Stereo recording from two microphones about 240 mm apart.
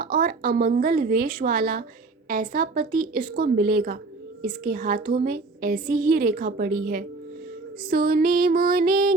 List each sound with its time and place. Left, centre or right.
0.0 s a woman's voice: right